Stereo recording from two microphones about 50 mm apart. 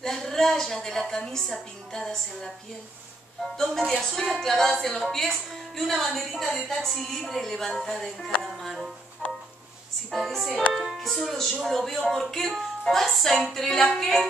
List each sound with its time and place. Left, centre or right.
0.0 s a woman's voice: centre
1.9 s music: centre
4.0 s speech: centre
8.4 s music: centre
9.2 s music: right
10.1 s speech: centre
10.7 s music: centre
11.0 s speech: centre
13.5 s music: centre